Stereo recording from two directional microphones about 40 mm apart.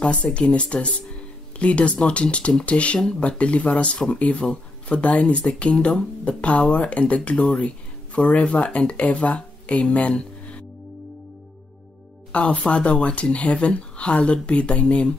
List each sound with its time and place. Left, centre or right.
0.0 s speech: left
3.3 s speech: left
12.3 s speech: left